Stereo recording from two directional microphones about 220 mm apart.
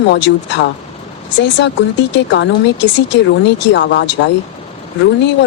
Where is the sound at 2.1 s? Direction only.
55° left (ahead or behind).